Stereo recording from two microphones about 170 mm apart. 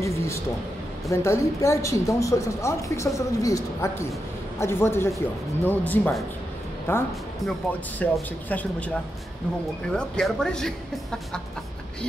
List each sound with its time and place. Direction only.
0.0 s a sound: 15° left (ahead or behind)
1.1 s speech: 15° left (ahead or behind)
9.9 s speech: 5° left (ahead or behind)